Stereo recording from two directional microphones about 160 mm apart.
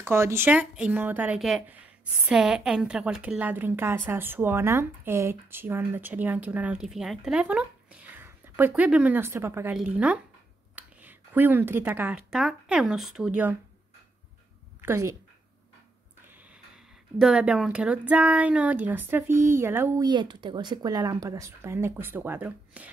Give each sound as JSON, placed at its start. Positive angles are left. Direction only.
{"t": 0.0, "sound": "a woman's voice", "side_deg": -15}
{"t": 14.8, "sound": "a woman's voice", "side_deg": -15}
{"t": 16.3, "sound": "a woman's voice", "side_deg": -10}